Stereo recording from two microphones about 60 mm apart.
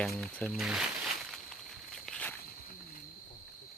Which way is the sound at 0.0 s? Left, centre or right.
Centre.